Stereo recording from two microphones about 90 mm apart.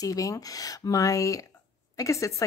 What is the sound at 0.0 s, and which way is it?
Speech, 40° left (ahead or behind).